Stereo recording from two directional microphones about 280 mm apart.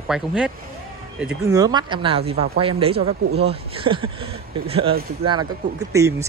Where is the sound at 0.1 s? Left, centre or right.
Centre.